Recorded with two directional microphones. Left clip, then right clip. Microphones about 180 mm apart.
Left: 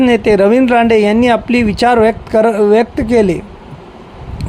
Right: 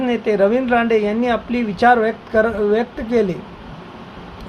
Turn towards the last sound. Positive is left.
turn(degrees=50)  # may be behind; listen again after turning